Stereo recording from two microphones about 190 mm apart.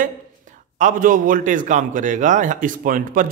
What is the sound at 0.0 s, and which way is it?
A man's voice, 40° right (ahead or behind).